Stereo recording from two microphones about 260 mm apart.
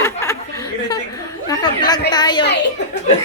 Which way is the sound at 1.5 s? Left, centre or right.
Centre.